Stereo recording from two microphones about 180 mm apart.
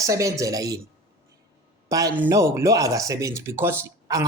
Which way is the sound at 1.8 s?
20° right (ahead or behind).